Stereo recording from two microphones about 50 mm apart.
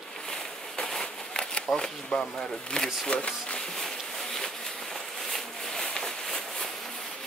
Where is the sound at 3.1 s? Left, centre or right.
Left.